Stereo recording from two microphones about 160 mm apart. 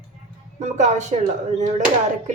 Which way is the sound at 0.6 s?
45° right (ahead or behind).